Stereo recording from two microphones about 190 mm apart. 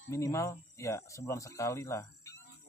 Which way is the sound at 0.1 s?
15° left (ahead or behind).